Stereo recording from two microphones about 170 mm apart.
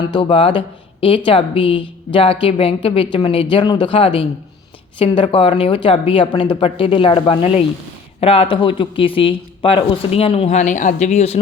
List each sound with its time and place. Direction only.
0.0 s speech: 25° left (ahead or behind)